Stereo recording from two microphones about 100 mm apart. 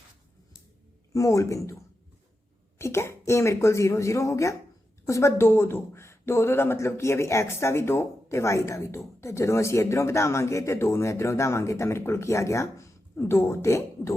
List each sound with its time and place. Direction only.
1.1 s speech: 30° left (ahead or behind)